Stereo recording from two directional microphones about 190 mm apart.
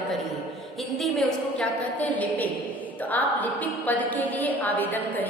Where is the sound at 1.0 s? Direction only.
Centre (ahead or behind).